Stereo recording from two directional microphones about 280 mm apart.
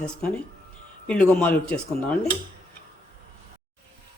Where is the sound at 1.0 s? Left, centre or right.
Centre.